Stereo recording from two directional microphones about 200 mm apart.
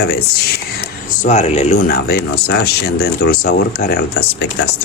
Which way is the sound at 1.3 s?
35° left (ahead or behind).